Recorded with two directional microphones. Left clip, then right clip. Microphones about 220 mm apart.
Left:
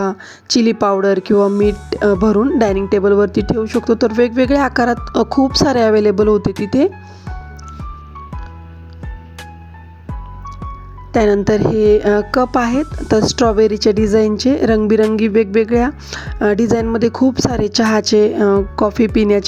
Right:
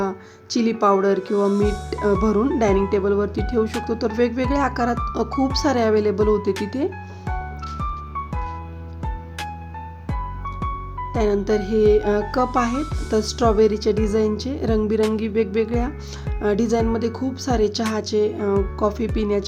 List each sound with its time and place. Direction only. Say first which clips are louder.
0.0 s speech: left 6 dB; 35° left (ahead or behind)
11.1 s speech: left 8 dB; 35° left (ahead or behind)